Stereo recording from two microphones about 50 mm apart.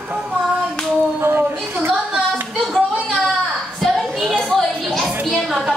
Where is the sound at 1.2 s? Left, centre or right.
Right.